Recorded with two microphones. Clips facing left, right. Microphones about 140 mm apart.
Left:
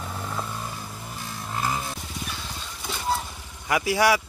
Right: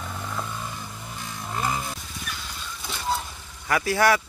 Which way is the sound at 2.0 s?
30° left (ahead or behind).